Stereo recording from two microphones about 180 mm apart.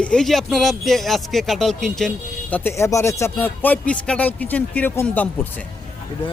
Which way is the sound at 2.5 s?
15° left (ahead or behind).